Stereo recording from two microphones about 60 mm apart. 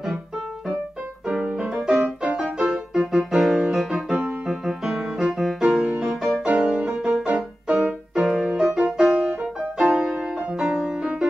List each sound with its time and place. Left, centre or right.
1.4 s music: centre
2.0 s music: centre
2.6 s music: centre
7.6 s music: centre
8.1 s music: centre